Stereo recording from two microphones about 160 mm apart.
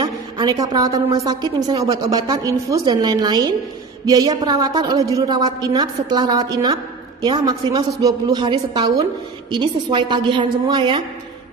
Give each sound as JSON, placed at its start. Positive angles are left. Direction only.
{"t": 0.0, "sound": "a woman's voice", "side_deg": -25}